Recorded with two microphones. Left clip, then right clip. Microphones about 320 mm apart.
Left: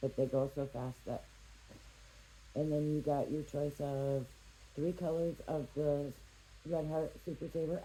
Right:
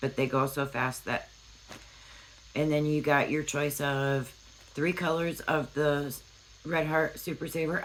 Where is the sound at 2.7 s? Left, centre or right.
Right.